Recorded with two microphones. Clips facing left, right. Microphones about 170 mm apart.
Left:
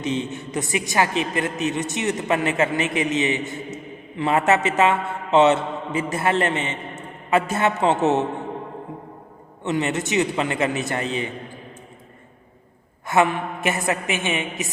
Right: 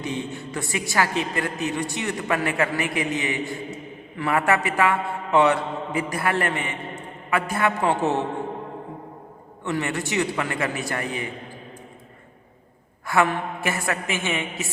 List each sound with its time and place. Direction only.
0.0 s mantra: 20° left (ahead or behind)
9.6 s mantra: 20° left (ahead or behind)
13.1 s mantra: 20° left (ahead or behind)